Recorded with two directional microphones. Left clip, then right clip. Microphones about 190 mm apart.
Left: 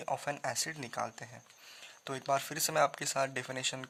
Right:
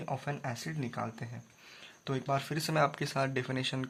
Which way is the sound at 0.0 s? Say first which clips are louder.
Left 2 dB; 45° left (ahead or behind).